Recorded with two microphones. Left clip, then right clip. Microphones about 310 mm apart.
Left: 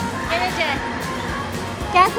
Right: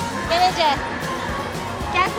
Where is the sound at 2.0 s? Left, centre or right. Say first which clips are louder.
Left 6 dB; centre.